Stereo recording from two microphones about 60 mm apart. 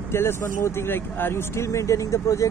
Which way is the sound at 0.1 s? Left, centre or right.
Left.